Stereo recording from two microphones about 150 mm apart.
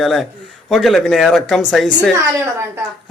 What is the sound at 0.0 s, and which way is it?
Speech, centre (ahead or behind).